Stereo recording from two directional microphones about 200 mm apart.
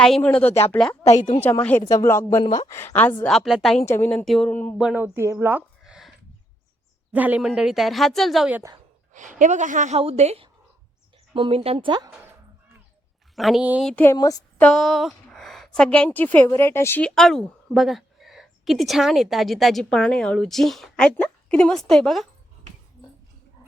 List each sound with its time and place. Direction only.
0.0 s a woman's voice: 5° left (ahead or behind)
1.1 s a woman's voice: 35° left (ahead or behind)
1.4 s a woman's voice: 10° left (ahead or behind)
3.8 s a woman's voice: 10° left (ahead or behind)
4.8 s speech: 5° right (ahead or behind)
9.1 s a woman's voice: 40° right (ahead or behind); by 12.1 s 20° right (ahead or behind)
13.3 s speech: centre (ahead or behind)
13.9 s a woman's voice: 10° left (ahead or behind)
14.6 s a woman's voice: centre (ahead or behind)